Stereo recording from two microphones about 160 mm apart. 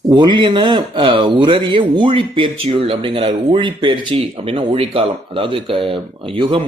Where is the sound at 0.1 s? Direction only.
30° right (ahead or behind).